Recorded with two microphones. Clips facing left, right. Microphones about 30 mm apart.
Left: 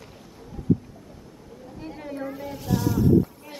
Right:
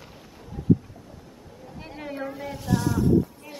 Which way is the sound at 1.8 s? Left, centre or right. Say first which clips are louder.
Even; right.